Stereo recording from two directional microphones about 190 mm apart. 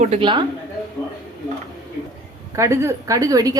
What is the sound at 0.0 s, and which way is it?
Speech, 30° right (ahead or behind).